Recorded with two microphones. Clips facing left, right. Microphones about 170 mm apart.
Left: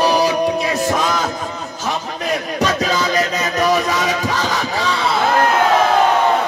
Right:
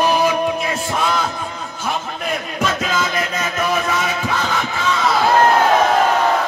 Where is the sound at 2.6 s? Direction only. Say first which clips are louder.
Left 2 dB; 40° left (ahead or behind).